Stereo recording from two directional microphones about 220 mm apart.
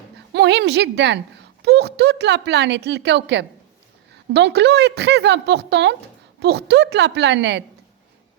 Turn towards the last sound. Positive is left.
turn(degrees=-55)  # may be behind; listen again after turning